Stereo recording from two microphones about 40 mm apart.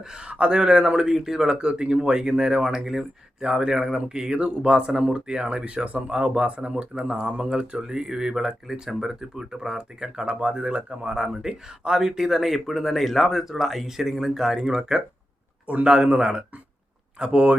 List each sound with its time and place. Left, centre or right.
0.3 s speech: right; by 1.5 s centre
1.5 s speech: right
11.1 s speech: centre